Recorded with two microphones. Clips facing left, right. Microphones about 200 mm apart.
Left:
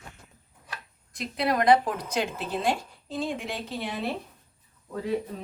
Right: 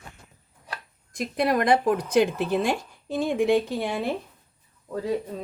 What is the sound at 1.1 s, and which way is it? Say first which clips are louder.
A woman's voice: right 3 dB; 50° right (ahead or behind).